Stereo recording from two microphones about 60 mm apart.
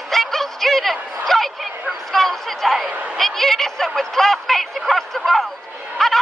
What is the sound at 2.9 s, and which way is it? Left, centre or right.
Speech, right.